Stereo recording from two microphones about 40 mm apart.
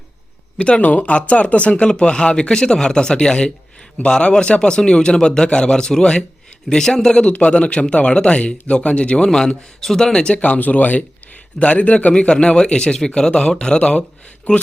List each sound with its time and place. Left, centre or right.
0.8 s speech: left
1.9 s speech: left
9.2 s a man's voice: centre
10.4 s speech: left